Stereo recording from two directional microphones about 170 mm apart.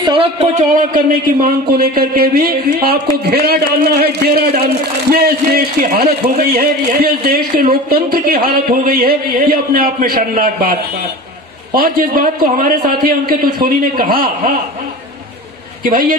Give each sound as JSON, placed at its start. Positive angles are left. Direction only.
{"t": 0.0, "sound": "a sound", "side_deg": -30}
{"t": 0.6, "sound": "speech", "side_deg": -55}
{"t": 15.8, "sound": "speech", "side_deg": -55}